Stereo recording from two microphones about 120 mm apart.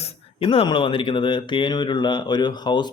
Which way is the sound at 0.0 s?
55° left (ahead or behind).